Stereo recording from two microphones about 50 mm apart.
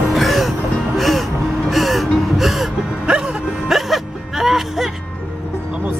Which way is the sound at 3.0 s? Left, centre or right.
Centre.